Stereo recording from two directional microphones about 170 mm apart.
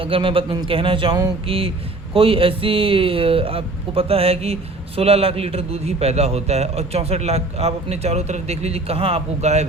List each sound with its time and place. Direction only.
0.0 s a man's voice: 30° right (ahead or behind)